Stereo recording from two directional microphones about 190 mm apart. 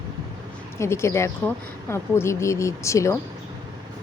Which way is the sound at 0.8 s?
15° left (ahead or behind).